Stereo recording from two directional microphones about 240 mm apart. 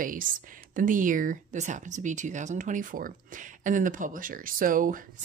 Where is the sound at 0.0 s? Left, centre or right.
Right.